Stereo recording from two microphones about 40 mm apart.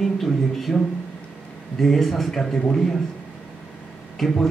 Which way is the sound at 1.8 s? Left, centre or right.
Centre.